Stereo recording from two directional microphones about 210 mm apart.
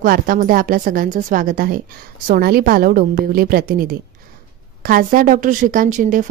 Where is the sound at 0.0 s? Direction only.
40° right (ahead or behind).